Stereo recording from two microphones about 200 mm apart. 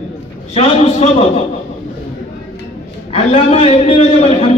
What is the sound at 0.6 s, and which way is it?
Speech, 30° left (ahead or behind).